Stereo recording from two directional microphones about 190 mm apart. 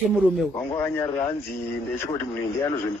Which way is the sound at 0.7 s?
10° left (ahead or behind).